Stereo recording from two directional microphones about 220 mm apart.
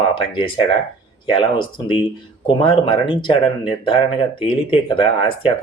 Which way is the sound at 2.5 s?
25° left (ahead or behind).